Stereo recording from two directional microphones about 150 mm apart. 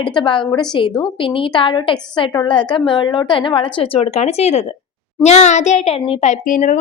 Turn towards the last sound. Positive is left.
turn(degrees=60)  # may be behind; listen again after turning